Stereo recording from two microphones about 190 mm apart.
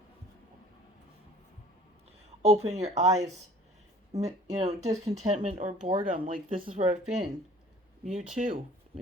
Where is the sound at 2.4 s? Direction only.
35° right (ahead or behind).